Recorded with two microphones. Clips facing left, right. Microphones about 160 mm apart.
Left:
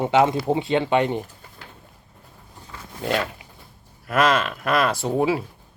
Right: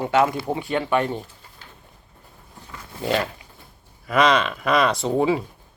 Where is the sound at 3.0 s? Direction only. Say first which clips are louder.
Right 1 dB; centre (ahead or behind).